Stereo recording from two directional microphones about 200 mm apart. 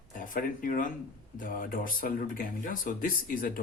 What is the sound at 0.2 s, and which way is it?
Speech, 45° left (ahead or behind).